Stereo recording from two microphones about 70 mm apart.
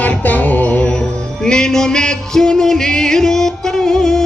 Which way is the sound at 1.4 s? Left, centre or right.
Centre.